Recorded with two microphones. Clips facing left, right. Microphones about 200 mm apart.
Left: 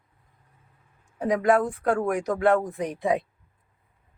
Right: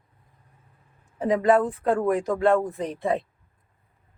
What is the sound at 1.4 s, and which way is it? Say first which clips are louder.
Speech: right 1 dB; 10° left (ahead or behind).